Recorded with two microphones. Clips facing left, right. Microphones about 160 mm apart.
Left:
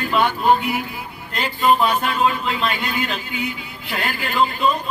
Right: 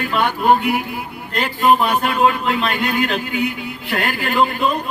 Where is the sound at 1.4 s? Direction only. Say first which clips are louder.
Right 2 dB; 55° right (ahead or behind).